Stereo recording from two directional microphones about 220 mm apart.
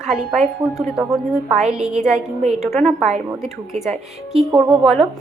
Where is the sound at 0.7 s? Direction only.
Centre (ahead or behind).